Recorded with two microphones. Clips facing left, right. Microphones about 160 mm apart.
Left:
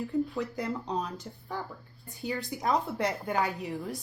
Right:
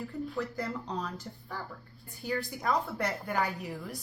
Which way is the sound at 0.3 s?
20° left (ahead or behind).